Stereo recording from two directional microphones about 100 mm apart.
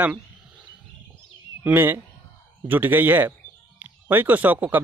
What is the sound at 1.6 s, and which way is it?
Speech, 20° right (ahead or behind).